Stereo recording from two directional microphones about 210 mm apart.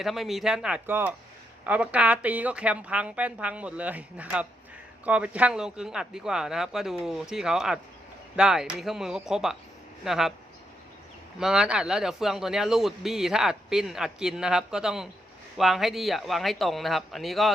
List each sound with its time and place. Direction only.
0.0 s speech: centre (ahead or behind)
11.3 s speech: 5° right (ahead or behind)